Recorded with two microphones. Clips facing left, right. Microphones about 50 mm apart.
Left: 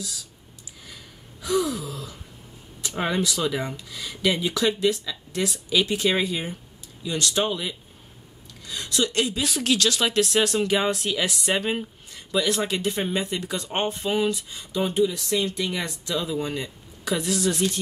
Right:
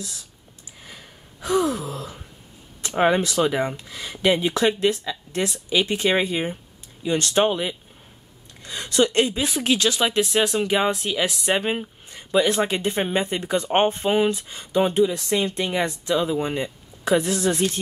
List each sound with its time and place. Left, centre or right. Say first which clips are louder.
0.8 s gasp: right 2 dB; right
1.9 s wail: right 3 dB; right
3.0 s speech: right 6 dB; right
5.7 s speech: right 2 dB; centre